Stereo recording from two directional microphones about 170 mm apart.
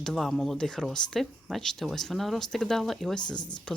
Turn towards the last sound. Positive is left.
turn(degrees=25)  # may be behind; listen again after turning